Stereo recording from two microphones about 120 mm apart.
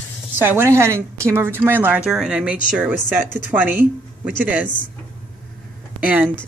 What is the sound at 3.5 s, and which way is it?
Speech, 15° right (ahead or behind).